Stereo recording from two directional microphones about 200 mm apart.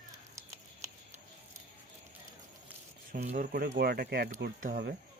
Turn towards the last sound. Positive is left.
turn(degrees=-50)  # may be behind; listen again after turning